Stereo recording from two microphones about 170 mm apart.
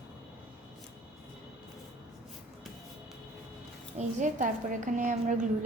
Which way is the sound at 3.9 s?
45° right (ahead or behind).